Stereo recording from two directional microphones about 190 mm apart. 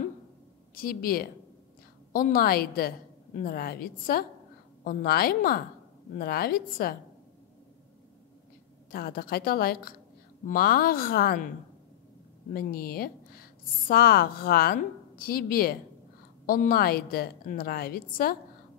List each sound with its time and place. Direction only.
0.7 s a woman's voice: 50° left (ahead or behind)
8.9 s a woman's voice: 50° left (ahead or behind)
12.5 s a woman's voice: 50° left (ahead or behind)